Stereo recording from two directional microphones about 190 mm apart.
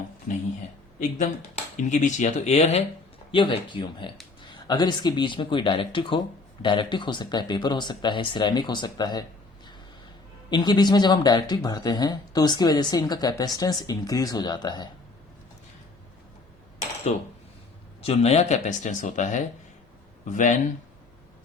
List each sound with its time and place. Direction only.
1.7 s speech: 40° left (ahead or behind); by 9.2 s 20° left (ahead or behind)
10.5 s speech: 25° left (ahead or behind)
17.1 s speech: 40° left (ahead or behind)